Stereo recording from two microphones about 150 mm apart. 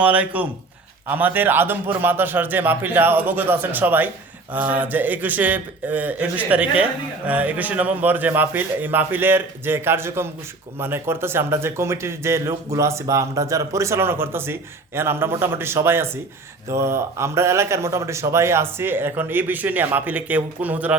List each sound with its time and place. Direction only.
0.0 s a man's voice: 10° right (ahead or behind)